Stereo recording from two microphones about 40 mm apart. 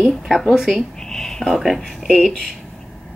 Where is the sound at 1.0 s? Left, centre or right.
Centre.